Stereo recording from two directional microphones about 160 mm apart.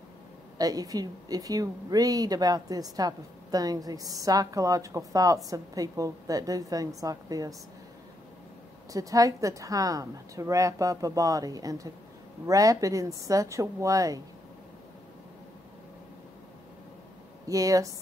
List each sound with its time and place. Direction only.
0.6 s a woman's voice: 25° right (ahead or behind)
8.9 s a woman's voice: 20° right (ahead or behind)
17.5 s a woman's voice: 20° right (ahead or behind)